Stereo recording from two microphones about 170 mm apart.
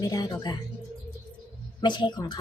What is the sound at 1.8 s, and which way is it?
Speech, 25° left (ahead or behind).